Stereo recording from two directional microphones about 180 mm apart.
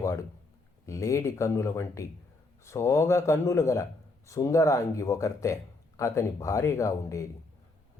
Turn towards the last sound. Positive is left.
turn(degrees=15)  # may be behind; listen again after turning